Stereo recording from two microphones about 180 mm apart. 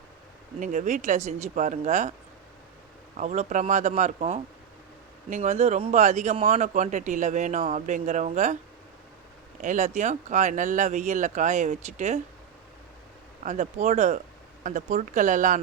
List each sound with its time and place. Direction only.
0.6 s speech: 45° right (ahead or behind)
3.2 s speech: 45° right (ahead or behind)
9.6 s speech: 45° right (ahead or behind)
13.4 s speech: 40° right (ahead or behind)